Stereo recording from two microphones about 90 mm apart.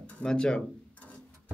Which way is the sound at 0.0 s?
10° left (ahead or behind).